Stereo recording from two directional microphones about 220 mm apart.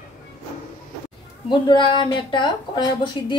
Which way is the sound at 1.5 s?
20° left (ahead or behind).